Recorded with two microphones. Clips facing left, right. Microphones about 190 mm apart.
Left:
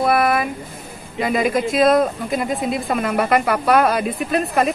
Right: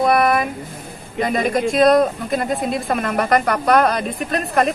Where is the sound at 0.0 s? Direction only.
5° left (ahead or behind).